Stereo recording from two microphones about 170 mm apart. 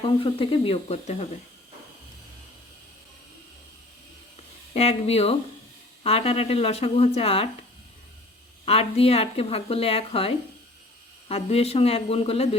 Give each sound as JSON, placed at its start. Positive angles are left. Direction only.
{"t": 0.0, "sound": "speech", "side_deg": 30}
{"t": 4.7, "sound": "speech", "side_deg": 35}
{"t": 8.6, "sound": "speech", "side_deg": 35}